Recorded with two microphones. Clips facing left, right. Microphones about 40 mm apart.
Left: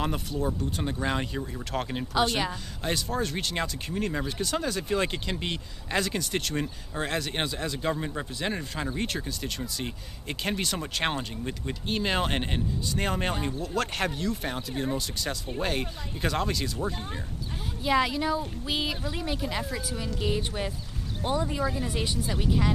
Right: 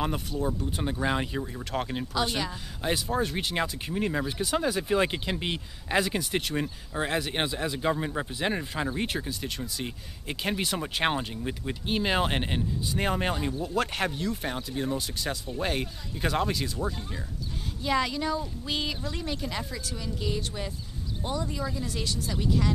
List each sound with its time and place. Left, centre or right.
0.0 s speech: centre
17.8 s speech: centre